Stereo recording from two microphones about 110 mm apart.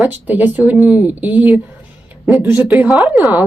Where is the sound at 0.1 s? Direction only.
15° right (ahead or behind).